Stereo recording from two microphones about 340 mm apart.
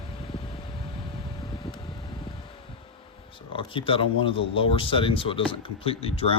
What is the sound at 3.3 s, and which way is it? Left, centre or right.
Speech, centre.